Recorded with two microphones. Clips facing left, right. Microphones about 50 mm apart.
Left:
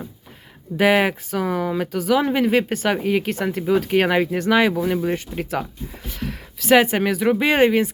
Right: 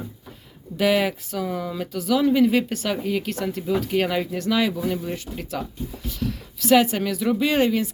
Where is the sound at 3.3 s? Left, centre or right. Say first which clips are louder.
Left 4 dB; left.